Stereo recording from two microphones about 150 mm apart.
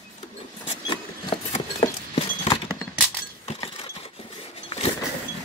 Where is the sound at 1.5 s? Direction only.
45° left (ahead or behind).